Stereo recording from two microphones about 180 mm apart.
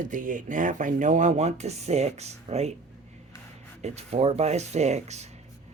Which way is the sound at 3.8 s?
35° right (ahead or behind).